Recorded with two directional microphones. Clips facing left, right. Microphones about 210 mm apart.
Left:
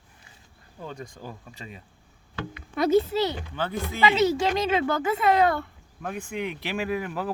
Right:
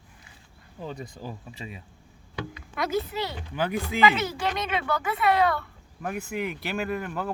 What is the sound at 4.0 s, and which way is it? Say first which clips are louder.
Speech: left 3 dB; 25° left (ahead or behind).